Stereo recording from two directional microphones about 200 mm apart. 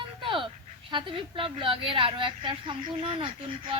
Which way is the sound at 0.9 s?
25° right (ahead or behind).